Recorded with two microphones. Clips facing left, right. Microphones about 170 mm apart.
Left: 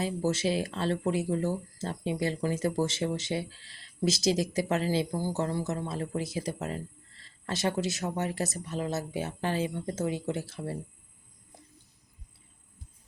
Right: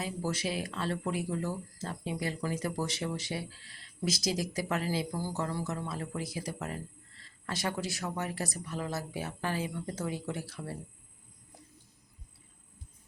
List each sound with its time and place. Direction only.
0.0 s speech: 25° left (ahead or behind)